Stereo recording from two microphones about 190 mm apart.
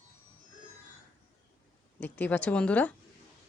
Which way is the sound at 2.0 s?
10° left (ahead or behind).